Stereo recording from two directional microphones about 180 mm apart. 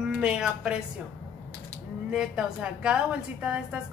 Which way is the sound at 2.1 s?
5° right (ahead or behind).